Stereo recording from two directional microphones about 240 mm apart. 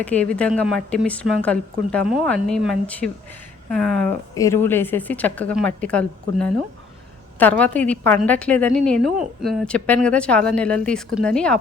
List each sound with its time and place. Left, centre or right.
0.0 s a woman's voice: centre